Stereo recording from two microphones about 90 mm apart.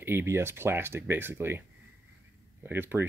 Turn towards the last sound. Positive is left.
turn(degrees=-25)  # may be behind; listen again after turning